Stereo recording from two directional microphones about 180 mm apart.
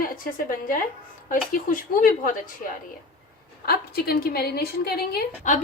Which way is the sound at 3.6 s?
60° left (ahead or behind).